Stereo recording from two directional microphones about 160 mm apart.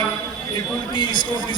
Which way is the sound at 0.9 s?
30° left (ahead or behind).